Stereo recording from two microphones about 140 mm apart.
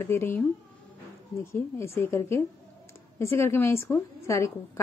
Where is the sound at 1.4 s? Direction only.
20° left (ahead or behind).